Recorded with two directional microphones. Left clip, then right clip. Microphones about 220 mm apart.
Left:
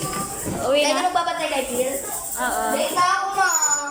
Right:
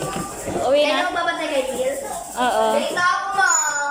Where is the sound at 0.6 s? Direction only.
10° left (ahead or behind).